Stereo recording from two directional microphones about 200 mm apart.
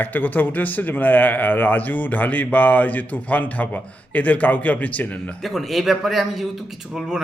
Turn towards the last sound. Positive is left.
turn(degrees=0)  # may be behind; listen again after turning